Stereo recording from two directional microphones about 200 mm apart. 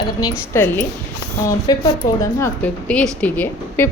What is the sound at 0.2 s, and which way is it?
A woman's voice, 15° left (ahead or behind).